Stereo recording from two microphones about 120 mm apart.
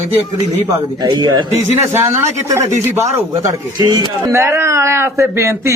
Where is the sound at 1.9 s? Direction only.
20° right (ahead or behind).